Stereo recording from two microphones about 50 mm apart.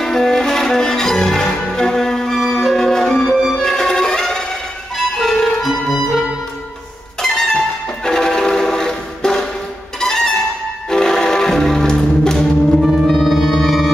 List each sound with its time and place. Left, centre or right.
0.0 s music: centre
3.3 s music: centre
3.6 s music: centre
7.2 s music: centre
12.8 s music: centre